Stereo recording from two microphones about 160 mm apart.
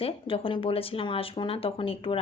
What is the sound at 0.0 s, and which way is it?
Speech, 35° left (ahead or behind).